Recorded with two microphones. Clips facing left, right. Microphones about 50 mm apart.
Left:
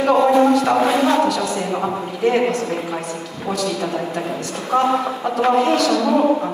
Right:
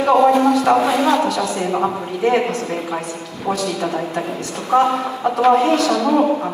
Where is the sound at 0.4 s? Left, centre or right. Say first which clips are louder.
Left 1 dB; left.